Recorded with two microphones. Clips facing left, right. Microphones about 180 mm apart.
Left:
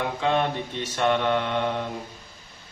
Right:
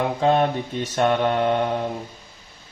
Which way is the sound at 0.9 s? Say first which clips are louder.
Right 3 dB; 45° right (ahead or behind).